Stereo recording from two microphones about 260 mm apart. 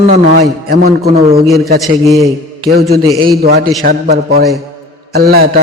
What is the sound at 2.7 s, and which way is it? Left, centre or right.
A man's voice, right.